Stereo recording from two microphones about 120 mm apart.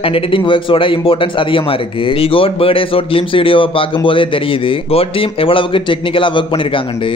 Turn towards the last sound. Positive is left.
turn(degrees=45)  # may be behind; listen again after turning